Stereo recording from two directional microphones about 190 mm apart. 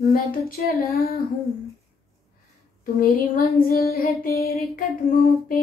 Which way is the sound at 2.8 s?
50° left (ahead or behind).